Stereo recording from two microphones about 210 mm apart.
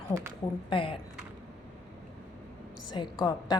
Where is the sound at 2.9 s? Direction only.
20° left (ahead or behind).